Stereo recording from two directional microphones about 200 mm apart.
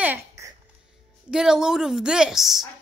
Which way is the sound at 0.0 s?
10° right (ahead or behind).